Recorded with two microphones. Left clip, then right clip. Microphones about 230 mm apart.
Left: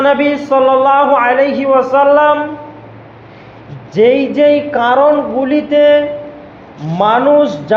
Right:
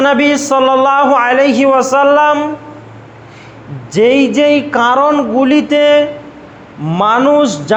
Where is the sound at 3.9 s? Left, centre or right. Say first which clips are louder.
Even; right.